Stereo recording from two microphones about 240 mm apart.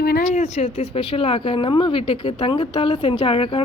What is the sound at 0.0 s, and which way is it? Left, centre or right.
A woman's voice, left.